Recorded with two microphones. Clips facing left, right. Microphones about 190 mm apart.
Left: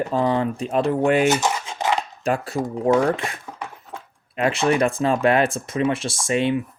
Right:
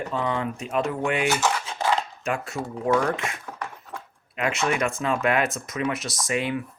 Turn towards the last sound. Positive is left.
turn(degrees=25)  # may be behind; listen again after turning